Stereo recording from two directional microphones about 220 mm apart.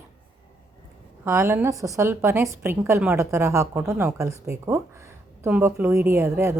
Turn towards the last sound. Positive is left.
turn(degrees=-10)  # may be behind; listen again after turning